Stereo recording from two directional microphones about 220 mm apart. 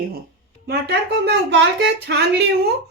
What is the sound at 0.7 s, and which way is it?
Speech, 45° right (ahead or behind).